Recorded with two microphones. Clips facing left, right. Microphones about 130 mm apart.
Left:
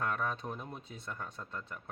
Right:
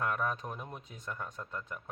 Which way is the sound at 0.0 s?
10° right (ahead or behind).